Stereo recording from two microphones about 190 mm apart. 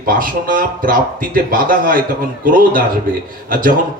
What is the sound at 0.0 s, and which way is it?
A man's voice, 50° right (ahead or behind).